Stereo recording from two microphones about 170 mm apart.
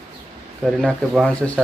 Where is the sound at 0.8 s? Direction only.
Centre (ahead or behind).